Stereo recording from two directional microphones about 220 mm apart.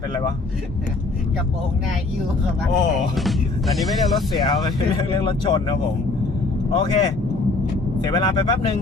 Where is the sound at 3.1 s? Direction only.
Centre (ahead or behind).